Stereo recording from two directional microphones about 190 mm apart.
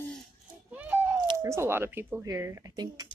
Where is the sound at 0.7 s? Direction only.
10° right (ahead or behind).